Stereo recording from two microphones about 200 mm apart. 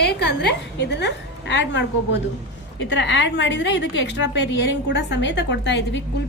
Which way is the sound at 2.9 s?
65° left (ahead or behind).